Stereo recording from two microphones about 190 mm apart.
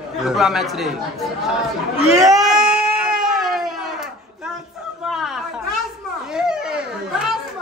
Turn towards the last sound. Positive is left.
turn(degrees=-5)  # may be behind; listen again after turning